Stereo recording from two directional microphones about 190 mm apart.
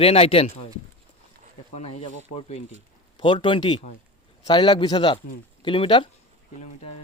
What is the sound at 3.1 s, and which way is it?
A man's voice, 25° left (ahead or behind).